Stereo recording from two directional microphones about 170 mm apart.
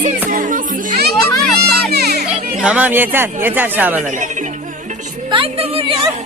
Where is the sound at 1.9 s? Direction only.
70° right (ahead or behind).